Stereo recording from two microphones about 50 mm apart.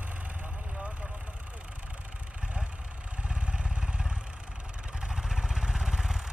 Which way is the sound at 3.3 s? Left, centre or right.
Right.